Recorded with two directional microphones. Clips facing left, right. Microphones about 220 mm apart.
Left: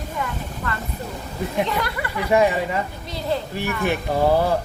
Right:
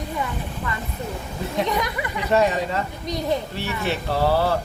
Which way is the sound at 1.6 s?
15° right (ahead or behind).